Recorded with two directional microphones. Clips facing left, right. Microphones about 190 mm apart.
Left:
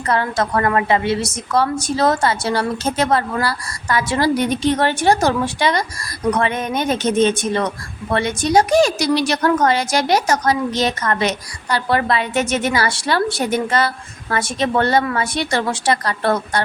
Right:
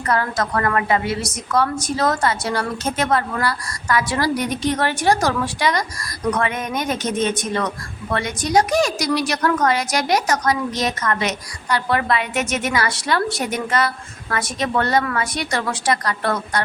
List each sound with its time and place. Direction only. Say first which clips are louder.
0.1 s a woman's voice: left 2 dB; 25° left (ahead or behind)